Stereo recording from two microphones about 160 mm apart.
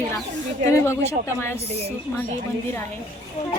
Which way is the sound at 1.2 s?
15° left (ahead or behind).